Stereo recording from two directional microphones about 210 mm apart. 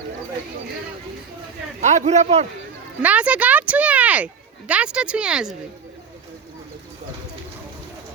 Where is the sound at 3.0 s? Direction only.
5° right (ahead or behind).